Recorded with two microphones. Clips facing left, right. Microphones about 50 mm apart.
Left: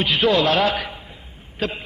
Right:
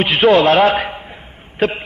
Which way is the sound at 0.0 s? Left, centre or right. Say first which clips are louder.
Right 7 dB; right.